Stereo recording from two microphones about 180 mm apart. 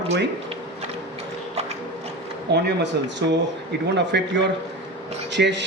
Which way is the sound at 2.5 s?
70° right (ahead or behind).